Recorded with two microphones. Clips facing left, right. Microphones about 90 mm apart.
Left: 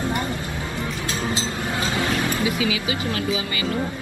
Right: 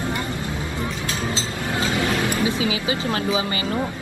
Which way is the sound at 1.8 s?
25° left (ahead or behind).